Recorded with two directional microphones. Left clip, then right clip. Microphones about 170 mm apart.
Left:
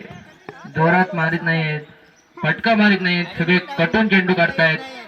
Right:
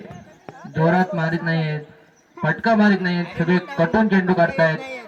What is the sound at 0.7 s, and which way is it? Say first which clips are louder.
A man's voice: left 3 dB; 25° right (ahead or behind).